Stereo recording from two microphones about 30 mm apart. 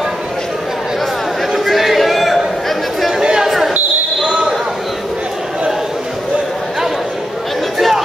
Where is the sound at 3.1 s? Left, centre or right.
Right.